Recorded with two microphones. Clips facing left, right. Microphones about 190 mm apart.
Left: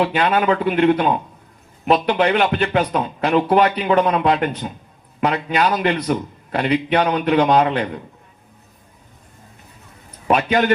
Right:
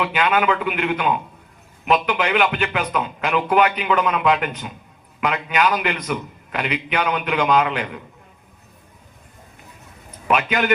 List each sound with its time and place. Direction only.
0.0 s a man's voice: 35° left (ahead or behind)
10.2 s a man's voice: 35° left (ahead or behind)